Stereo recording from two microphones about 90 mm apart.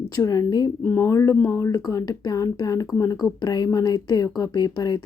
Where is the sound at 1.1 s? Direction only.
35° left (ahead or behind).